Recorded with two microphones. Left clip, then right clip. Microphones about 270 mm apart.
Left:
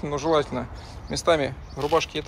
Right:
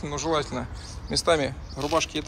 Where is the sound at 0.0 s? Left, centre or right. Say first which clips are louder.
Left 4 dB; centre.